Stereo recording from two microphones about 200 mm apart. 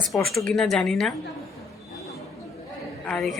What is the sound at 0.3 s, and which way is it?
Speech, centre (ahead or behind).